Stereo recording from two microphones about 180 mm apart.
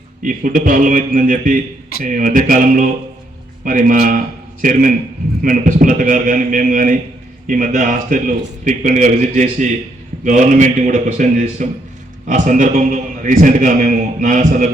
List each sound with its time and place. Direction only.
0.2 s a man's voice: 50° right (ahead or behind)